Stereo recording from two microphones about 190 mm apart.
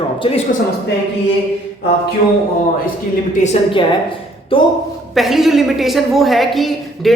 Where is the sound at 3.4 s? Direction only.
25° left (ahead or behind).